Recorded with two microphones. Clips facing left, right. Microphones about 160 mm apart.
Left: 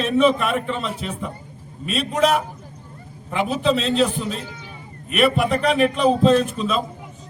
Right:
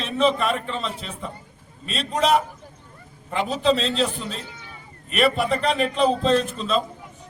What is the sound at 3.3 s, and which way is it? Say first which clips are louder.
A man's voice: left 1 dB; 5° left (ahead or behind).